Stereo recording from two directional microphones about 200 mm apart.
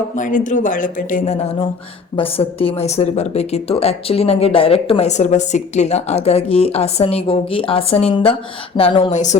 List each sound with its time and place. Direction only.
0.2 s speech: 40° left (ahead or behind)